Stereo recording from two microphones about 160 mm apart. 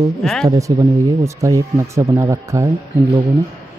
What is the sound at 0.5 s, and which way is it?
Speech, 20° right (ahead or behind).